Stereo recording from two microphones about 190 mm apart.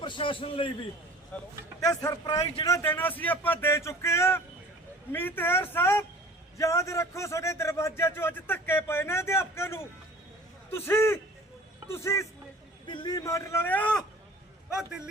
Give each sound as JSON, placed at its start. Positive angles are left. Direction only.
{"t": 0.0, "sound": "a man's voice", "side_deg": 25}
{"t": 1.3, "sound": "a man's voice", "side_deg": 10}
{"t": 1.8, "sound": "a man's voice", "side_deg": 20}